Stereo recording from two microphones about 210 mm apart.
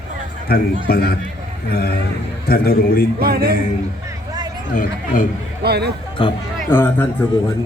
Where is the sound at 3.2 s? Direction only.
45° right (ahead or behind).